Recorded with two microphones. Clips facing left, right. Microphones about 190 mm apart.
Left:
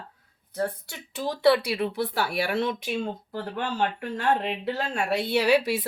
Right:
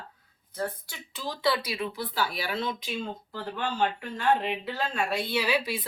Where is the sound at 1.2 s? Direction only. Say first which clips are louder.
Left 7 dB; 65° left (ahead or behind).